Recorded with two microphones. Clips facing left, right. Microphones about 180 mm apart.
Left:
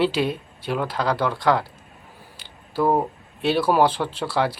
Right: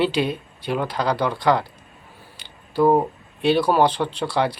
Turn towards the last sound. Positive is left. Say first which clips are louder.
# right 1 dB
turn(degrees=5)  # may be behind; listen again after turning